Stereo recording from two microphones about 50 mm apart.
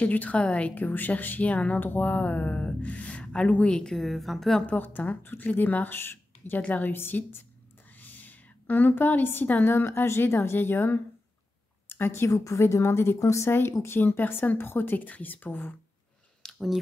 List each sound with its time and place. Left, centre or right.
0.0 s speech: left
0.7 s a woman's voice: left
3.7 s a woman's voice: centre
4.0 s a woman's voice: centre
4.6 s a woman's voice: left
12.4 s a woman's voice: left
13.5 s a woman's voice: left
16.5 s speech: centre